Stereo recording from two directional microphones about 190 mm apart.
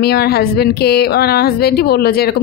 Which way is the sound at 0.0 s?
55° left (ahead or behind).